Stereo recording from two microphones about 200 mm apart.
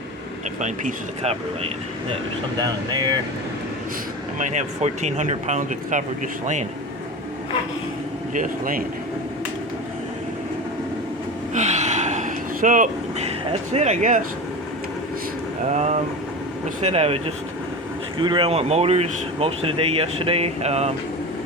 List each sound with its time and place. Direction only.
0.6 s speech: 35° right (ahead or behind)
2.6 s speech: 20° right (ahead or behind)
4.4 s speech: 35° right (ahead or behind)
8.3 s speech: 40° right (ahead or behind)
11.5 s gasp: 35° right (ahead or behind)
15.7 s speech: 35° right (ahead or behind)